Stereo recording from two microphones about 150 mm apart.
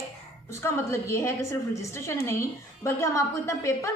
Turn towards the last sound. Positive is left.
turn(degrees=20)  # may be behind; listen again after turning